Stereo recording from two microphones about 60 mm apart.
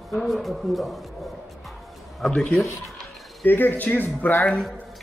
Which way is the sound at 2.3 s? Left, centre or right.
Left.